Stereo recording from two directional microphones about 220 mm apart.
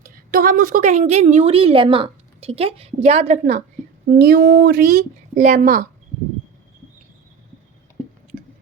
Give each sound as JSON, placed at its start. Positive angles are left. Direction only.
{"t": 0.0, "sound": "a woman's voice", "side_deg": -40}
{"t": 4.1, "sound": "speech", "side_deg": -45}